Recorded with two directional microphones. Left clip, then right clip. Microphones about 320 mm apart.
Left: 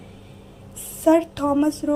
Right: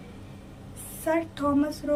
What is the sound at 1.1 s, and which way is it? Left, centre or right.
Speech, centre.